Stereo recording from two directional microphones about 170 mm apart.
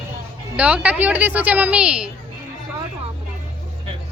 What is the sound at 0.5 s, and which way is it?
A woman's voice, 10° right (ahead or behind).